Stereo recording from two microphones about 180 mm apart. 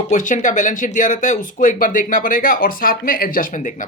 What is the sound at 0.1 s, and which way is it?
Speech, 45° left (ahead or behind).